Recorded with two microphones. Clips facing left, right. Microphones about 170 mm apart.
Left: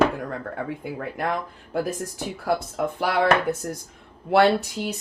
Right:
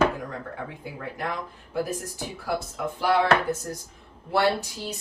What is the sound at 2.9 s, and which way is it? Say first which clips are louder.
Speech: right 1 dB; 60° left (ahead or behind).